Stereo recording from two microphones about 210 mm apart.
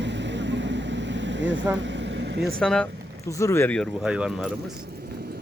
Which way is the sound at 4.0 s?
5° right (ahead or behind).